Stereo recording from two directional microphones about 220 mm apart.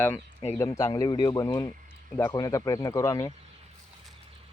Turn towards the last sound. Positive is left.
turn(degrees=15)  # may be behind; listen again after turning